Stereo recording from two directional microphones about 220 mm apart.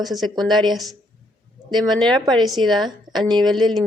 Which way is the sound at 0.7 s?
Centre (ahead or behind).